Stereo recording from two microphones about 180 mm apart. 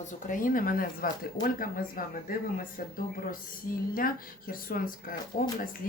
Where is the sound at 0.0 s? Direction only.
45° left (ahead or behind).